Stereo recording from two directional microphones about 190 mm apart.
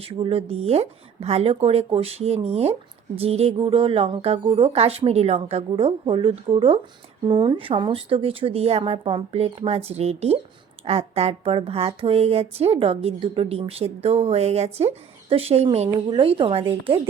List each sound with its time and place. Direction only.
0.0 s a woman's voice: 30° right (ahead or behind)